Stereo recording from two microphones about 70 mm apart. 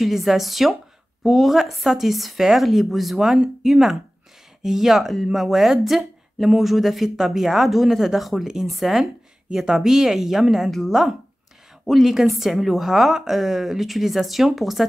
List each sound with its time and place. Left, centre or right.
0.0 s speech: centre